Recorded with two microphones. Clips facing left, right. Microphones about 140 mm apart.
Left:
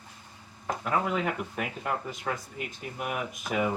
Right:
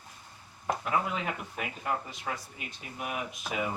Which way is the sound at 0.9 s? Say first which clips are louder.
Left 5 dB; 50° left (ahead or behind).